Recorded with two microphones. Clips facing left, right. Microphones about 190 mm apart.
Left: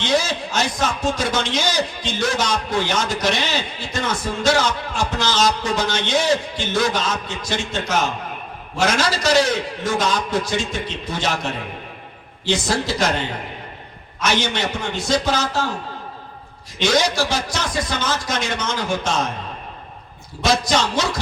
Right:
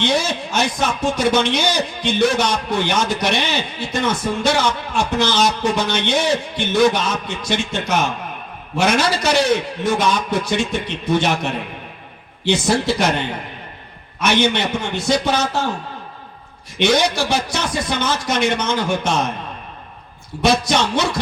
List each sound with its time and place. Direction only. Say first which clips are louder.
0.0 s a man's voice: right 1 dB; 60° right (ahead or behind)
16.7 s a man's voice: right 2 dB; 60° right (ahead or behind)
20.4 s a man's voice: right 2 dB; 60° right (ahead or behind)